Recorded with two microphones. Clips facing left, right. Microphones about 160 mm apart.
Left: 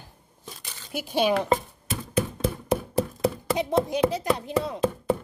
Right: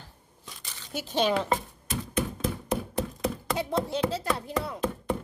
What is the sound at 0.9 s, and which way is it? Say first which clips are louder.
Speech: left 3 dB; 10° left (ahead or behind).